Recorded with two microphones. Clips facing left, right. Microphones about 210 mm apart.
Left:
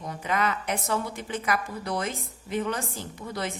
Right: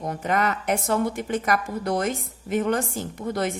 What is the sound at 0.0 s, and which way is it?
Speech, 50° right (ahead or behind).